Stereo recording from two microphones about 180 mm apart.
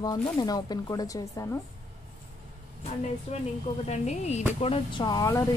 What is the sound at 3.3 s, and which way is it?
Speech, 30° left (ahead or behind).